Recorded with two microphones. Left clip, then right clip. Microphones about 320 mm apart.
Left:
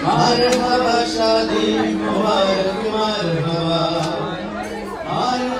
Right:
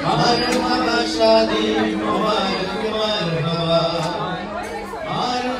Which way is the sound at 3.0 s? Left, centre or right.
Left.